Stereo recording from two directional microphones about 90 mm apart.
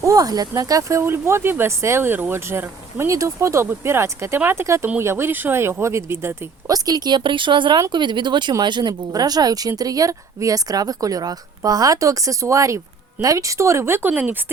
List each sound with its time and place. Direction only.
0.0 s speech: 40° right (ahead or behind)
6.7 s speech: 45° right (ahead or behind); by 14.3 s 20° right (ahead or behind)